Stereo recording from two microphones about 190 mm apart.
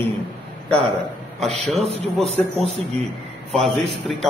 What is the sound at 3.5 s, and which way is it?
Speech, centre (ahead or behind).